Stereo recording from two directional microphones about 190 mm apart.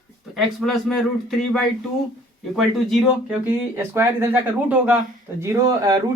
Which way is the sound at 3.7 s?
15° right (ahead or behind).